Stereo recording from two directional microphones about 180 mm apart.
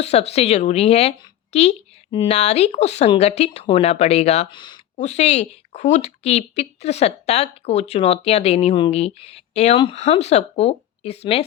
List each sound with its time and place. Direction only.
0.0 s speech: 35° left (ahead or behind)
4.9 s speech: 40° left (ahead or behind)